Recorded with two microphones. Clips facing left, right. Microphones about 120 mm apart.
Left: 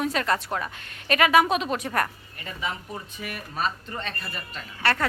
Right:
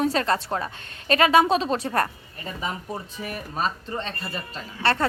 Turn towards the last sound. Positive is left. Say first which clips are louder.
# right 2 dB
turn(degrees=-30)  # may be behind; listen again after turning